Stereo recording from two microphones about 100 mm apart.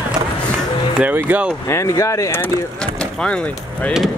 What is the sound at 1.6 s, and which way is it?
Speech, 35° left (ahead or behind).